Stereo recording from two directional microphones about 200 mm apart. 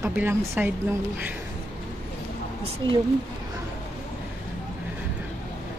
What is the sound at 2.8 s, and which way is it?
Speech, 25° right (ahead or behind).